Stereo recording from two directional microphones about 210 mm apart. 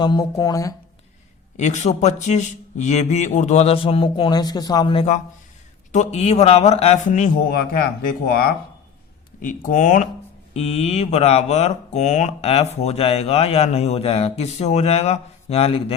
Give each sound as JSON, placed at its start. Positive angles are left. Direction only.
{"t": 0.0, "sound": "speech", "side_deg": 20}
{"t": 1.5, "sound": "speech", "side_deg": 35}